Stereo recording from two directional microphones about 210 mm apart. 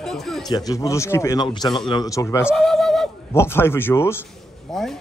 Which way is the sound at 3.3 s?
10° left (ahead or behind).